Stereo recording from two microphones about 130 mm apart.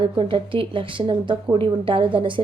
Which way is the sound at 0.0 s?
40° right (ahead or behind).